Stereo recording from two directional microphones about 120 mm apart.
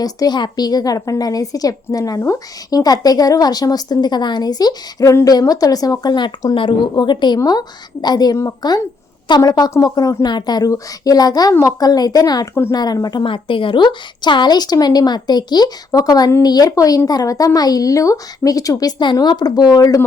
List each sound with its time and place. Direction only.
0.0 s a woman's voice: 35° left (ahead or behind)